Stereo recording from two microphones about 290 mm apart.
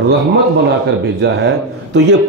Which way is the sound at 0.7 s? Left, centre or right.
Right.